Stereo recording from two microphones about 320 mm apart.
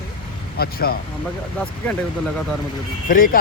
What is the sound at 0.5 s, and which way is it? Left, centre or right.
Speech, left.